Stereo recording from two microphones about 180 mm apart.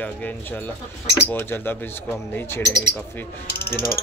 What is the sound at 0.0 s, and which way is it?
Speech, 10° left (ahead or behind).